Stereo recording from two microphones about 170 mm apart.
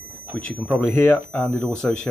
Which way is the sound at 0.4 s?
5° left (ahead or behind).